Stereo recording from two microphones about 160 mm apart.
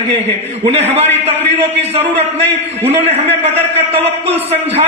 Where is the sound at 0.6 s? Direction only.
40° right (ahead or behind).